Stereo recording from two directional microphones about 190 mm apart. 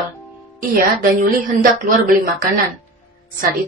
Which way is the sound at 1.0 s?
45° right (ahead or behind).